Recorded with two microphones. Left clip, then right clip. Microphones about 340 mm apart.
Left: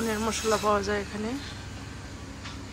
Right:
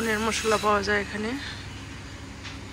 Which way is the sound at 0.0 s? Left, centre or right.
Centre.